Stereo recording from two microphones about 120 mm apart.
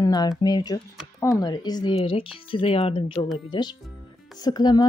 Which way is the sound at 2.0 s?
50° left (ahead or behind).